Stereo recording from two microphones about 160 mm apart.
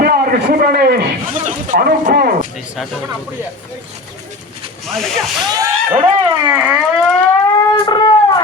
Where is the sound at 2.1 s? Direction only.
60° right (ahead or behind).